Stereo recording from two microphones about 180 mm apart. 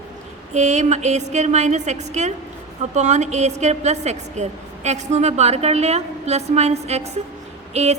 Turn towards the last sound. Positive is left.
turn(degrees=-35)  # may be behind; listen again after turning